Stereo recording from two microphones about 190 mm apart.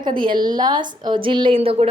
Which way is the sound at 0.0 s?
25° right (ahead or behind).